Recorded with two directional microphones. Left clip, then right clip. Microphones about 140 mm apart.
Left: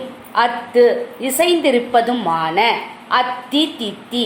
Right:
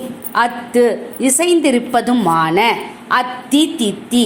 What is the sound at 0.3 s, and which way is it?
A woman's voice, 50° right (ahead or behind).